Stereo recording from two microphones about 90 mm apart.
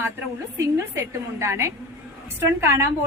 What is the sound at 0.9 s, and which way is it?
A woman's voice, 35° right (ahead or behind).